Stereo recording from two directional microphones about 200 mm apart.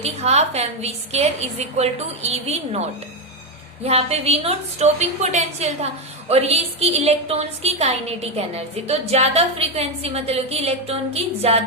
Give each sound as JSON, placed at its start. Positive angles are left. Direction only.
{"t": 0.0, "sound": "a woman's voice", "side_deg": -30}
{"t": 3.8, "sound": "a woman's voice", "side_deg": -30}